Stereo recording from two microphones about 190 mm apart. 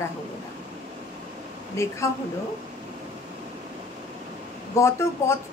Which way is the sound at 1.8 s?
15° left (ahead or behind).